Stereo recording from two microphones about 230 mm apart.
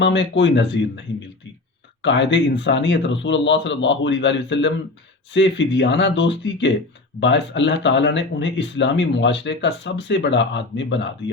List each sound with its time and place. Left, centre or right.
0.0 s speech: left